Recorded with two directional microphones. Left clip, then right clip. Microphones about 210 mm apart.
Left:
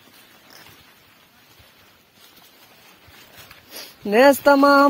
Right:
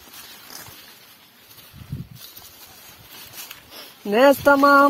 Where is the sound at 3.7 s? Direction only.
30° left (ahead or behind).